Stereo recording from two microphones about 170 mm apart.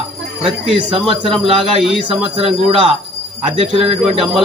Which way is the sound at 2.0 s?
30° right (ahead or behind).